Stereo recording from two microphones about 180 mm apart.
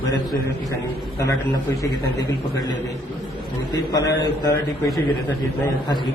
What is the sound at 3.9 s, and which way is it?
A man's voice, 20° left (ahead or behind).